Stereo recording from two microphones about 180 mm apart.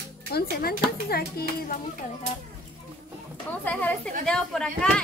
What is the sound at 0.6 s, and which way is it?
A child's voice, 60° left (ahead or behind).